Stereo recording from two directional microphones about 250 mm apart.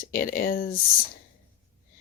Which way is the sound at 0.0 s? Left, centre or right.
Left.